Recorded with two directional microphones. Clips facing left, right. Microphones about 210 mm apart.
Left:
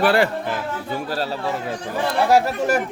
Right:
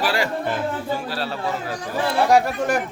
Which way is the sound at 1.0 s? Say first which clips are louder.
Left 2 dB; 45° left (ahead or behind).